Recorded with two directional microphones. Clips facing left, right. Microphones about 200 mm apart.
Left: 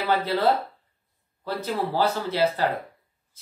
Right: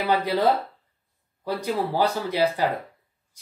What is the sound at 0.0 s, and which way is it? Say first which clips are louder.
Speech: right 1 dB; 15° right (ahead or behind).